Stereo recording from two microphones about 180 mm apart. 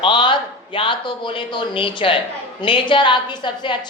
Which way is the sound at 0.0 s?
25° left (ahead or behind).